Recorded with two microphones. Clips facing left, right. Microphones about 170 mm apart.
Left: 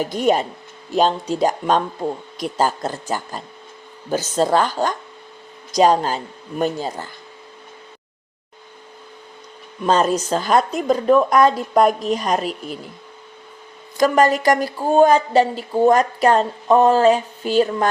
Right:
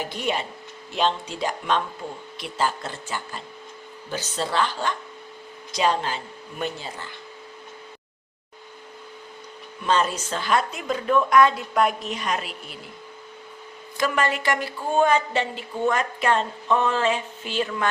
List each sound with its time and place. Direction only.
0.0 s speech: 45° left (ahead or behind)
9.8 s speech: 40° left (ahead or behind)
13.9 s speech: 40° left (ahead or behind)